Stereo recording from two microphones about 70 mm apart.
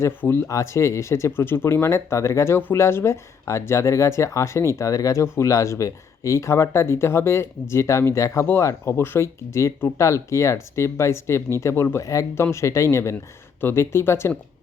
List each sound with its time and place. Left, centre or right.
0.2 s speech: left
0.4 s speech: left
4.8 s speech: left